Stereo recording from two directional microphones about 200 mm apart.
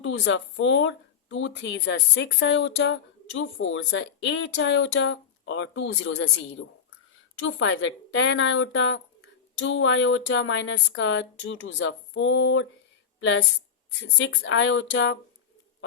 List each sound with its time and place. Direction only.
0.0 s speech: 70° left (ahead or behind)
7.3 s speech: 75° left (ahead or behind)